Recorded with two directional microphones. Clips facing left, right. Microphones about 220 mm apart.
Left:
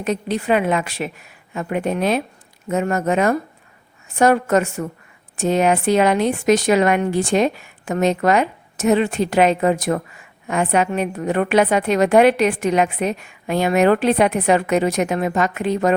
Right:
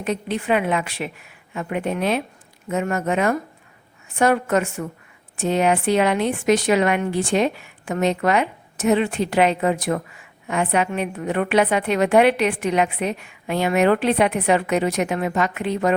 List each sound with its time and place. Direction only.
0.0 s a woman's voice: 40° left (ahead or behind)